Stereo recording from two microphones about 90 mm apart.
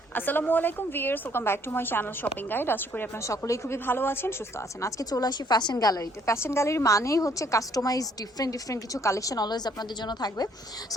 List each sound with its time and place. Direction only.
0.1 s a woman's voice: 20° left (ahead or behind)
3.2 s a woman's voice: 35° left (ahead or behind)
3.8 s a woman's voice: 25° left (ahead or behind)
4.8 s a woman's voice: 40° left (ahead or behind)